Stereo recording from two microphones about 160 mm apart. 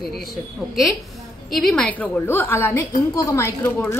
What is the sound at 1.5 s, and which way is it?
A woman's voice, 5° left (ahead or behind).